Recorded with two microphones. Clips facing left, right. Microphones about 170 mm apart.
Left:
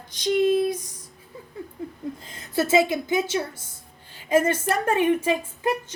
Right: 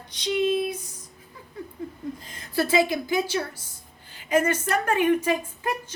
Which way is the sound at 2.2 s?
25° left (ahead or behind).